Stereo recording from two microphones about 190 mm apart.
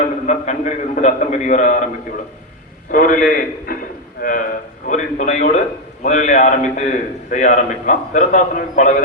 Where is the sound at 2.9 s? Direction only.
45° left (ahead or behind).